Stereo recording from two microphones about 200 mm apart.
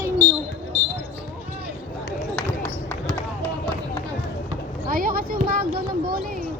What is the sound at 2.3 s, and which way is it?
Run, 5° left (ahead or behind).